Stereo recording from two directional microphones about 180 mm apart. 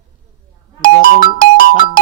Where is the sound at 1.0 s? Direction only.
50° left (ahead or behind).